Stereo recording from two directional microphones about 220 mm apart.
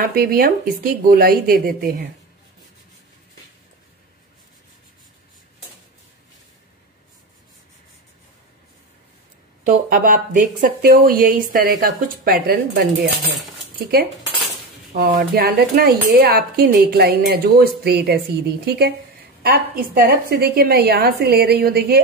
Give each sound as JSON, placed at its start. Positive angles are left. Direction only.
{"t": 0.0, "sound": "speech", "side_deg": -40}
{"t": 9.7, "sound": "speech", "side_deg": -40}